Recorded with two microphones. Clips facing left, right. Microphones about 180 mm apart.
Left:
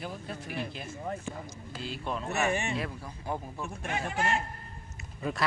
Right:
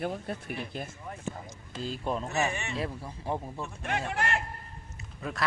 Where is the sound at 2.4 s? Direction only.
55° left (ahead or behind).